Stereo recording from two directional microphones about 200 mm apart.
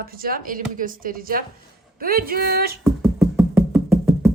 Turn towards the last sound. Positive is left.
turn(degrees=-5)  # may be behind; listen again after turning